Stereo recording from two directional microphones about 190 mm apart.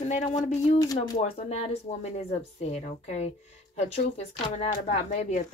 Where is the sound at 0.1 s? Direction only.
35° left (ahead or behind).